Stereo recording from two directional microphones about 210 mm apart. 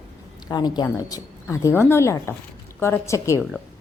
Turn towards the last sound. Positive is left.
turn(degrees=15)  # may be behind; listen again after turning